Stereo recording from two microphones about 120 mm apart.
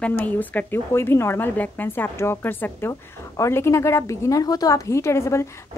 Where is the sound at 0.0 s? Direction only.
15° left (ahead or behind).